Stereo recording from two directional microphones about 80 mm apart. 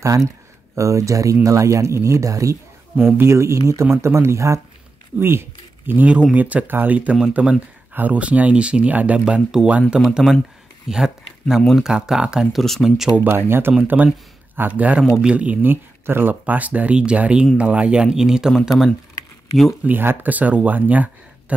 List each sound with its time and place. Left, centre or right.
0.0 s speech: right
5.2 s a sound: right
6.3 s speech: centre
13.1 s speech: right; by 18.6 s centre
19.8 s speech: right